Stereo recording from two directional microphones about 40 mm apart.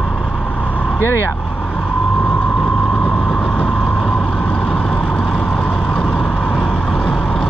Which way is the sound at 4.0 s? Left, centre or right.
Centre.